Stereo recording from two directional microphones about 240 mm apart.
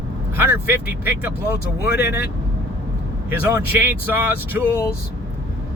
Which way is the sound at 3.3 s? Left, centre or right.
Centre.